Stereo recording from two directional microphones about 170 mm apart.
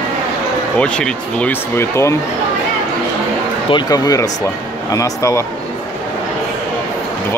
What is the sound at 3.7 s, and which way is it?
Speech, 25° left (ahead or behind).